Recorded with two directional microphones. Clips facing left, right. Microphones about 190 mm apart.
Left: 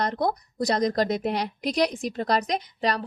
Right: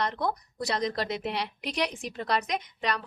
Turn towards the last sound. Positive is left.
turn(degrees=35)  # may be behind; listen again after turning